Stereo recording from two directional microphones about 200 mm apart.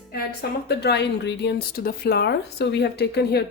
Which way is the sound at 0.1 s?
50° left (ahead or behind).